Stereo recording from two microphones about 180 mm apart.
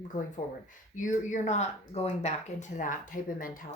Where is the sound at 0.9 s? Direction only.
45° left (ahead or behind).